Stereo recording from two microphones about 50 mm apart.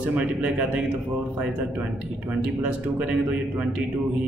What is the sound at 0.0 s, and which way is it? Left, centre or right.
Speech, right.